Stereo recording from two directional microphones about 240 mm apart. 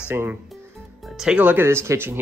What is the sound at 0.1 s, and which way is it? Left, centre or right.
Speech, centre.